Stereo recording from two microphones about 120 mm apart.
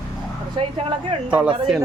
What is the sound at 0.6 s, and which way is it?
Speech, 45° right (ahead or behind).